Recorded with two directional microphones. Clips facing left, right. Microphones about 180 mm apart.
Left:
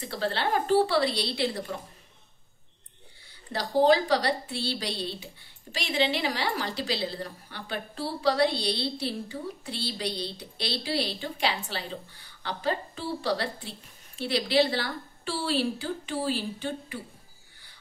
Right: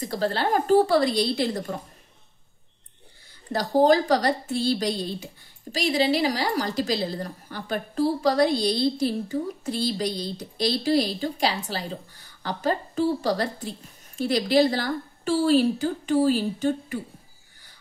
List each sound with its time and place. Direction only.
0.0 s a woman's voice: 40° right (ahead or behind)
3.5 s a woman's voice: 45° right (ahead or behind)